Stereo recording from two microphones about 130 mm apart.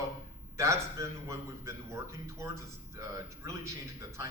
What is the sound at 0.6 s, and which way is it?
A man's voice, 20° right (ahead or behind).